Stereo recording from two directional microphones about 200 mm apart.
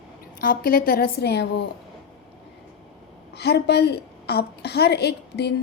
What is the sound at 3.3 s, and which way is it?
A woman's voice, 55° left (ahead or behind).